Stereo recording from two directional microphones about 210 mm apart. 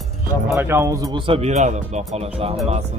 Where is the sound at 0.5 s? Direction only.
10° right (ahead or behind).